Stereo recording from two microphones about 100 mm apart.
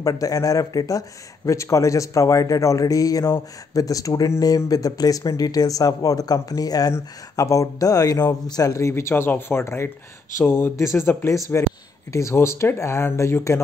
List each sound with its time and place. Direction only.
0.0 s speech: 35° left (ahead or behind)